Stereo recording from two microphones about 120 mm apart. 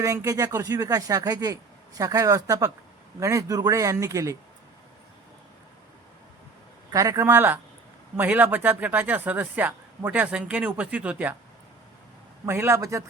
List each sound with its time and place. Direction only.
0.0 s speech: 25° right (ahead or behind)
6.9 s speech: 25° right (ahead or behind)
12.5 s speech: 20° right (ahead or behind)